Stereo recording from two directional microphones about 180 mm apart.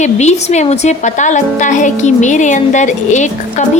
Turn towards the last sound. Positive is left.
turn(degrees=40)  # may be behind; listen again after turning